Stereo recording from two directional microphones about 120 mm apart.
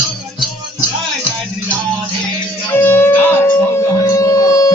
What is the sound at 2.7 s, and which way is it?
Music, 20° left (ahead or behind).